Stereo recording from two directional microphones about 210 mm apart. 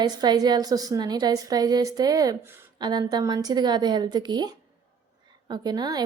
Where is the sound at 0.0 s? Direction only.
20° right (ahead or behind).